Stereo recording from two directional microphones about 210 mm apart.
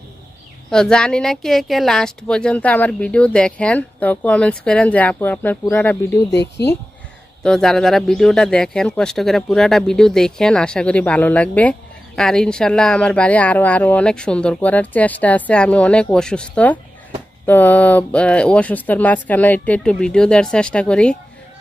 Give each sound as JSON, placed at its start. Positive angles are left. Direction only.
{"t": 0.7, "sound": "speech", "side_deg": 5}
{"t": 6.3, "sound": "speech", "side_deg": 55}
{"t": 7.4, "sound": "speech", "side_deg": 5}